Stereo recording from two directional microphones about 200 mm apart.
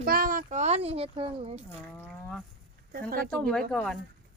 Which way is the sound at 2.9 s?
45° right (ahead or behind).